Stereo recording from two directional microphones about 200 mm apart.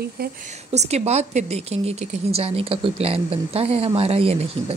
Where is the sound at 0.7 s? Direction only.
35° right (ahead or behind).